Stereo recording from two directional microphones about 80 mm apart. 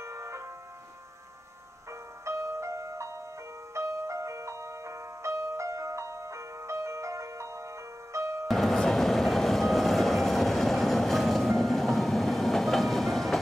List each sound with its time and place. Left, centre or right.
0.0 s music: right
1.9 s music: right
8.5 s train: centre